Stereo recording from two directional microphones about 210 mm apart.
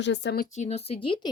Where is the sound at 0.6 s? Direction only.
30° left (ahead or behind).